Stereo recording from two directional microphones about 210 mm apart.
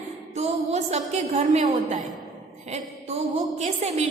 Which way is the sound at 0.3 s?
30° right (ahead or behind).